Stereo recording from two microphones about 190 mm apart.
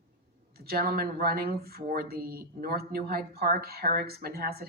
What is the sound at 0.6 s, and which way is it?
Speech, 55° right (ahead or behind).